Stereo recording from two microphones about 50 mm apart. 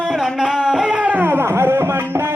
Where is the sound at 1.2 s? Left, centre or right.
Right.